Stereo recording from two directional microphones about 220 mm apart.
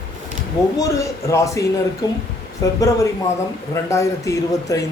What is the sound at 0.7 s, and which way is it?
A man's voice, 15° left (ahead or behind).